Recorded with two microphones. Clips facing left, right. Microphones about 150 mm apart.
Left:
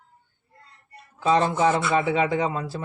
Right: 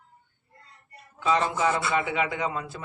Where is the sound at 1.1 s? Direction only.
35° left (ahead or behind).